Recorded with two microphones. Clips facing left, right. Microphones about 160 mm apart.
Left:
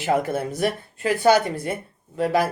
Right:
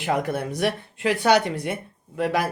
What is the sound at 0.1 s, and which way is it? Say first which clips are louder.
Speech: left 2 dB; 5° left (ahead or behind).